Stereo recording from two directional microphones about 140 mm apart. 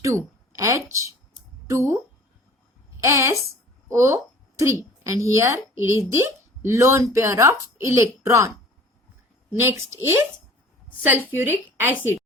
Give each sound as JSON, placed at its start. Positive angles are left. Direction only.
{"t": 0.0, "sound": "a sound", "side_deg": -20}
{"t": 1.6, "sound": "speech", "side_deg": -20}
{"t": 3.0, "sound": "a woman's voice", "side_deg": -20}
{"t": 11.3, "sound": "speech", "side_deg": -15}